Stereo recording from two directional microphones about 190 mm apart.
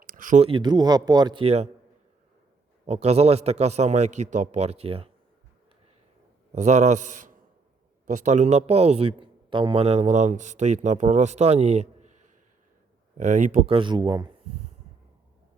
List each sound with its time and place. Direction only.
0.0 s a sound: 45° right (ahead or behind)
0.4 s speech: 25° right (ahead or behind)
2.8 s speech: 35° right (ahead or behind)
6.5 s speech: 40° right (ahead or behind)
13.7 s speech: 25° right (ahead or behind)